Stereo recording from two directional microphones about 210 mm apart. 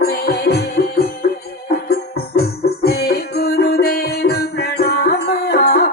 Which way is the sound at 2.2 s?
50° left (ahead or behind).